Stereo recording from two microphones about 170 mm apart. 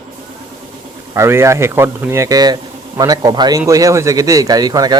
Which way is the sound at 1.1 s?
15° right (ahead or behind).